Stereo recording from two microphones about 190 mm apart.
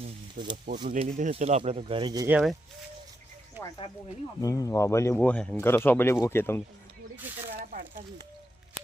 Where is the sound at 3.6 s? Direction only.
25° left (ahead or behind).